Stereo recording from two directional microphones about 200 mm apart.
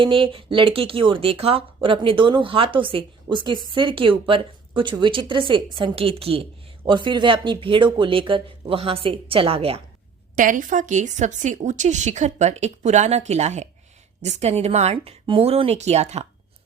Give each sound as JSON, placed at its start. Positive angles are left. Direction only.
{"t": 0.0, "sound": "speech", "side_deg": -25}
{"t": 10.3, "sound": "speech", "side_deg": -40}